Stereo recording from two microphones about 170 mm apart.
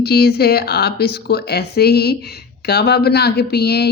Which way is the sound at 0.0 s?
70° left (ahead or behind).